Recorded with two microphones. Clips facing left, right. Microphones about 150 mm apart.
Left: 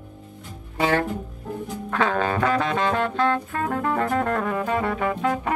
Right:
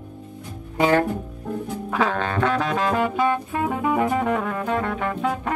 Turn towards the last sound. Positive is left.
turn(degrees=0)  # may be behind; listen again after turning